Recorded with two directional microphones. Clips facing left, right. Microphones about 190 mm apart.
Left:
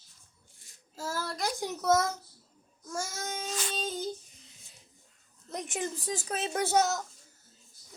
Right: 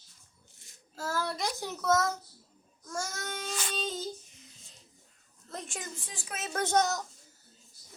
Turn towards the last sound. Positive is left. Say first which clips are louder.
# left 1 dB
turn(degrees=5)  # may be behind; listen again after turning